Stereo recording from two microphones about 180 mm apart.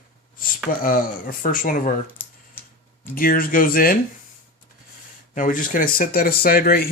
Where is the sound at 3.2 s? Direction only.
55° left (ahead or behind).